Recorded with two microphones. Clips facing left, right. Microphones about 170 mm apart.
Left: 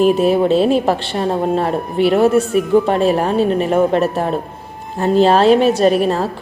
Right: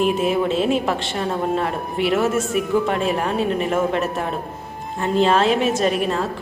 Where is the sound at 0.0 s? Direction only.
35° left (ahead or behind).